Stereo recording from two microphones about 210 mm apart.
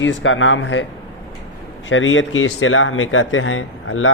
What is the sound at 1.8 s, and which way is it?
A man's voice, 65° left (ahead or behind).